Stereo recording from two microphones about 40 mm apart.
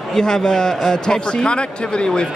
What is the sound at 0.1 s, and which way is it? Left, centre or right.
A man's voice, centre.